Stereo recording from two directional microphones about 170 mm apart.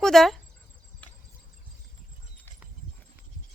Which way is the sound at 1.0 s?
10° left (ahead or behind).